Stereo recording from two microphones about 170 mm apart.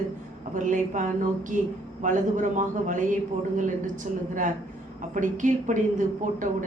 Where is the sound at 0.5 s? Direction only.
50° right (ahead or behind).